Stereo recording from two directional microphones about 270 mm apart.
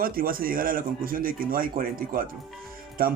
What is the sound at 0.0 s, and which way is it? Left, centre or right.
Speech, right.